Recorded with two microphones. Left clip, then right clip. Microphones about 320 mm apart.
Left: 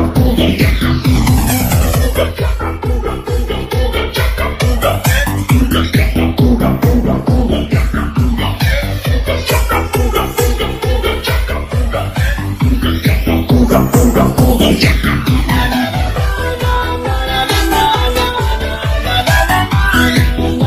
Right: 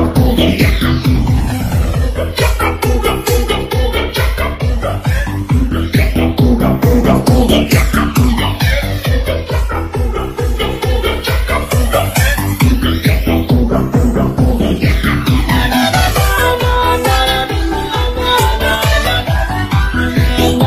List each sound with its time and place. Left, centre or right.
0.1 s music: centre
5.9 s music: centre
7.1 s music: right
12.8 s music: centre
13.7 s music: left
15.0 s music: centre